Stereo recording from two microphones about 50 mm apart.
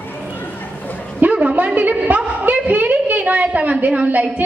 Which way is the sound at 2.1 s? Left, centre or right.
Right.